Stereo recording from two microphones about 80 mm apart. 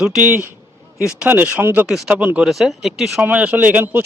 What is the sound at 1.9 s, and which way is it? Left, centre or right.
Speech, centre.